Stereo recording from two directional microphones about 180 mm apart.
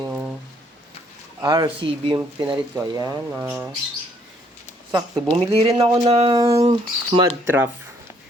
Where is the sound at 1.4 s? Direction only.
25° right (ahead or behind).